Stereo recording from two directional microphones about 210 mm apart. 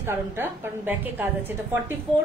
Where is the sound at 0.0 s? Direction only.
10° right (ahead or behind).